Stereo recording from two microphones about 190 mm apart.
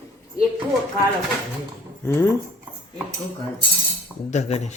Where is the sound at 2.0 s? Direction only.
10° left (ahead or behind).